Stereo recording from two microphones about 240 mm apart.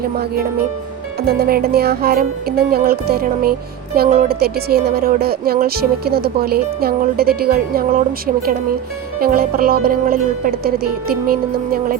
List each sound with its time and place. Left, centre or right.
1.2 s speech: right
9.2 s speech: right